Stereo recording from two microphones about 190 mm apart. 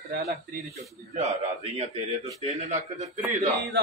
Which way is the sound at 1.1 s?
35° right (ahead or behind).